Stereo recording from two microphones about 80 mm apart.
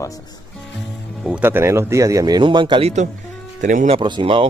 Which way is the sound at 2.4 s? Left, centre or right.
Right.